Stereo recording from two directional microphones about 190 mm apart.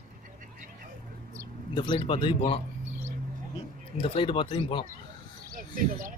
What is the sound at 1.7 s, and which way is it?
Speech, 25° left (ahead or behind).